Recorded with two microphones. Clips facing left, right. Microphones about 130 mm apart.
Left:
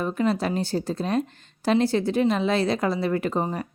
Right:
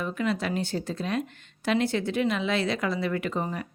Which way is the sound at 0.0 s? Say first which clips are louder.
Left 4 dB; 35° left (ahead or behind).